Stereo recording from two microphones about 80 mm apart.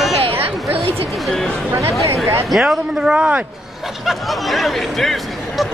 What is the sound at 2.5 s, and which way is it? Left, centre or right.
Speech, centre.